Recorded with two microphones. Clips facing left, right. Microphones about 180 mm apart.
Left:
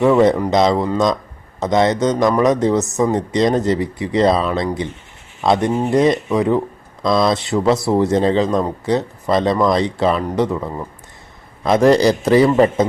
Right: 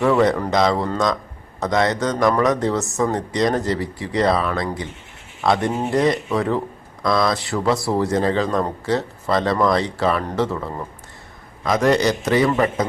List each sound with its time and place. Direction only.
0.0 s speech: 20° left (ahead or behind)
11.6 s a man's voice: 30° left (ahead or behind)